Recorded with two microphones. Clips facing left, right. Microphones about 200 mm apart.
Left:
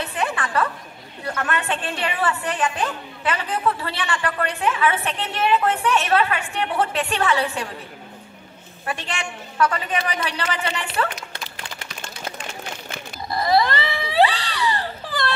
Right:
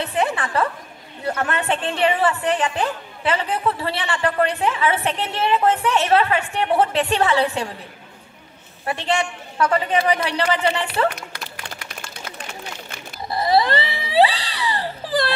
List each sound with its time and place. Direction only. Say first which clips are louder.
0.2 s a woman's voice: right 2 dB; 25° right (ahead or behind)
9.6 s a woman's voice: right 3 dB; 30° right (ahead or behind)
13.3 s baby cry: right 1 dB; 30° right (ahead or behind)